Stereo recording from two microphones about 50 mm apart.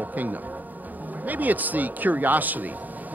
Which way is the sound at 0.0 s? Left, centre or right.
Right.